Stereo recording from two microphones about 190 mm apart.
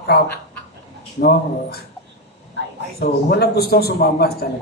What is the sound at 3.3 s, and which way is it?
Speech, 55° left (ahead or behind).